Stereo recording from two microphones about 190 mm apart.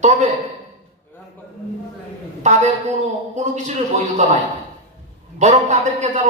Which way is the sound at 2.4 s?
40° right (ahead or behind).